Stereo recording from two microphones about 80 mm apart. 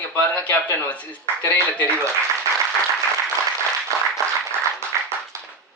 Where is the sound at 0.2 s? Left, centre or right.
Centre.